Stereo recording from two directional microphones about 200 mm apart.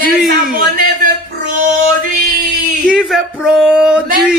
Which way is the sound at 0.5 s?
45° right (ahead or behind).